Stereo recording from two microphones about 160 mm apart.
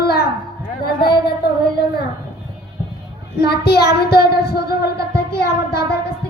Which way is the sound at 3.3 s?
85° left.